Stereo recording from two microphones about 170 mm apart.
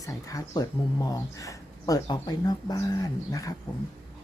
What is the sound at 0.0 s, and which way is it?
Speech, 20° left (ahead or behind).